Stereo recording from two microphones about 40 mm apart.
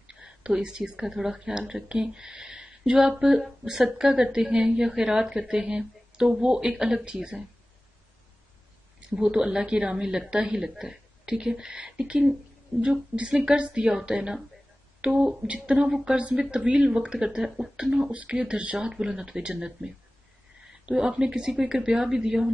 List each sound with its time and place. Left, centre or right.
0.1 s a sound: right
1.0 s a woman's voice: centre
9.1 s a woman's voice: right
13.1 s a woman's voice: right
15.4 s a woman's voice: right; by 18.1 s centre
18.1 s a woman's voice: right
19.0 s speech: centre
20.9 s speech: centre